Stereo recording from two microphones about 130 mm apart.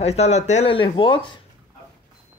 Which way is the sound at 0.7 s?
40° left (ahead or behind).